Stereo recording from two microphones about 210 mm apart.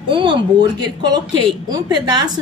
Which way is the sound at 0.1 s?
20° right (ahead or behind).